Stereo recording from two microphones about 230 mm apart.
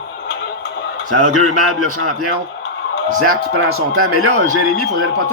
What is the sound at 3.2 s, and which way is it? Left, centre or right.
Speech, right.